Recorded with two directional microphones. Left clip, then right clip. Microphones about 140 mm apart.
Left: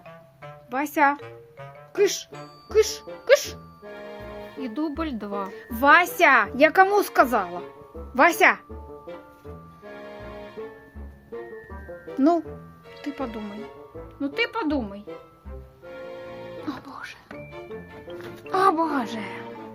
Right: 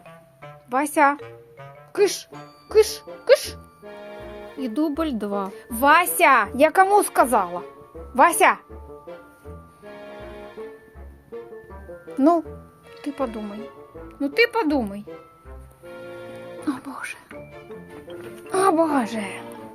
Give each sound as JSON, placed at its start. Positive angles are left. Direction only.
{"t": 0.4, "sound": "music", "side_deg": -5}
{"t": 2.3, "sound": "a woman's voice", "side_deg": 0}
{"t": 4.5, "sound": "speech", "side_deg": -30}
{"t": 5.5, "sound": "a woman's voice", "side_deg": 0}
{"t": 12.1, "sound": "speech", "side_deg": 0}
{"t": 14.2, "sound": "speech", "side_deg": -35}
{"t": 16.6, "sound": "speech", "side_deg": -20}
{"t": 18.4, "sound": "music", "side_deg": -5}
{"t": 18.8, "sound": "speech", "side_deg": -15}